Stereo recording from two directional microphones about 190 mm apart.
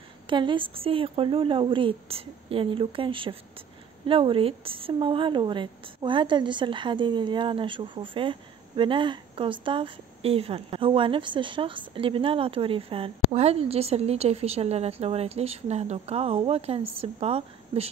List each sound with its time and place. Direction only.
0.3 s a woman's voice: 25° right (ahead or behind)